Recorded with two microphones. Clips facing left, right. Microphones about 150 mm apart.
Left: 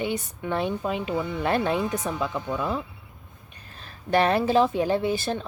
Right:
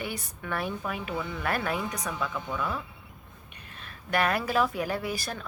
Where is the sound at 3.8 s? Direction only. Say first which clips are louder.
Left 6 dB; 30° left (ahead or behind).